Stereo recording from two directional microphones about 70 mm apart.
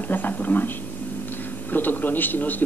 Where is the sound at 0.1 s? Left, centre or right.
Left.